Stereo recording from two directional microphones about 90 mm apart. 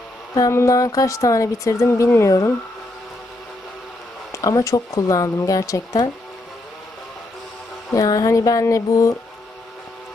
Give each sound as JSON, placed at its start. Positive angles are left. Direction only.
{"t": 0.3, "sound": "a woman's voice", "side_deg": 35}
{"t": 4.3, "sound": "a woman's voice", "side_deg": 40}
{"t": 7.9, "sound": "a woman's voice", "side_deg": 40}